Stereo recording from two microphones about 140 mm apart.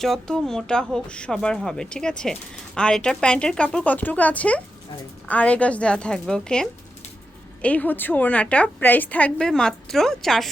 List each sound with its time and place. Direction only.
0.0 s speech: 5° left (ahead or behind)